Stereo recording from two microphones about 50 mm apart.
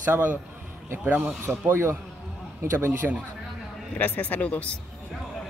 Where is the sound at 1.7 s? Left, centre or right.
Right.